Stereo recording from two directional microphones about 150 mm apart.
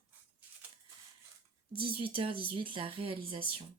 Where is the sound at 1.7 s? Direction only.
35° right (ahead or behind).